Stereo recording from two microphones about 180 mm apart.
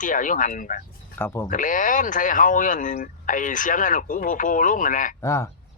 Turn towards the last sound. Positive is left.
turn(degrees=15)  # may be behind; listen again after turning